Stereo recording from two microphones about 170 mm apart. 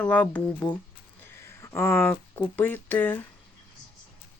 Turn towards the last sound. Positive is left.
turn(degrees=10)  # may be behind; listen again after turning